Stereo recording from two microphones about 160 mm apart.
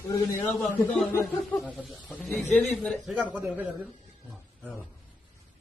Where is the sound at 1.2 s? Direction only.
Centre (ahead or behind).